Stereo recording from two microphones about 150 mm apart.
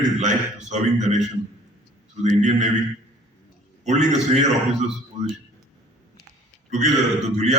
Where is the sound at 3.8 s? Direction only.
50° right (ahead or behind).